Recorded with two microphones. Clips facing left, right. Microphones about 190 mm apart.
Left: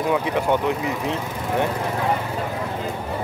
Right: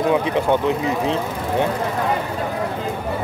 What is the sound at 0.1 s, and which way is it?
Speech, 20° right (ahead or behind).